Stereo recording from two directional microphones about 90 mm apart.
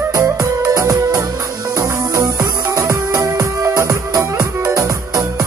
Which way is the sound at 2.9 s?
35° right (ahead or behind).